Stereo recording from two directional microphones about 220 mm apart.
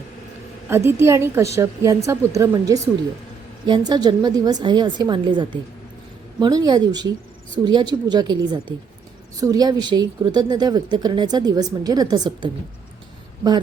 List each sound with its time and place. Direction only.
0.7 s a woman's voice: 10° right (ahead or behind)